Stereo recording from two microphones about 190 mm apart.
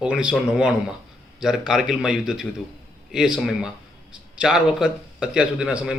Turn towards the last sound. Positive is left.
turn(degrees=-5)  # may be behind; listen again after turning